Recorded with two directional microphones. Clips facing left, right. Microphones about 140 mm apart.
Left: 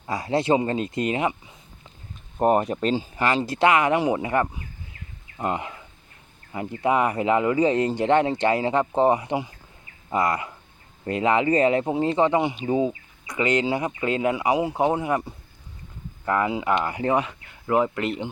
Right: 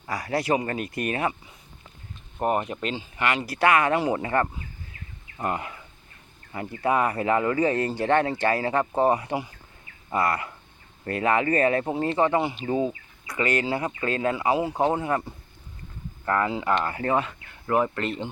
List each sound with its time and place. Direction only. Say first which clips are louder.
0.0 s speech: left 3 dB; 25° left (ahead or behind)
2.4 s speech: left 5 dB; 35° left (ahead or behind); by 18.3 s 15° left (ahead or behind)